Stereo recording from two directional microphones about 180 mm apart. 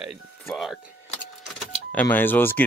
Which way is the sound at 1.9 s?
10° left (ahead or behind).